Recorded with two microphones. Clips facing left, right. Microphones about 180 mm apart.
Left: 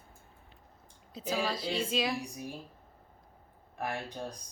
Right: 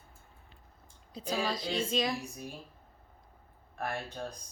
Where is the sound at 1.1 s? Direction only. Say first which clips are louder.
Even; 5° left (ahead or behind).